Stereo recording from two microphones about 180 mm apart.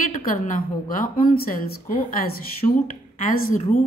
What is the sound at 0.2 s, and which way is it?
A woman's voice, 50° left (ahead or behind).